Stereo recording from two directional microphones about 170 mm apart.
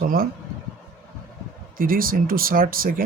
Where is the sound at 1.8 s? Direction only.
55° right (ahead or behind).